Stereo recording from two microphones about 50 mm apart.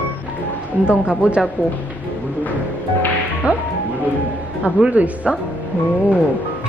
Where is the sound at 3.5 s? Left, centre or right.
Right.